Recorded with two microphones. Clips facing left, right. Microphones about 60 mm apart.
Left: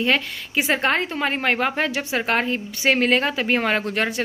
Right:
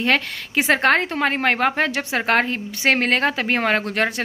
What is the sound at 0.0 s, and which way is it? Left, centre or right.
A woman's voice, right.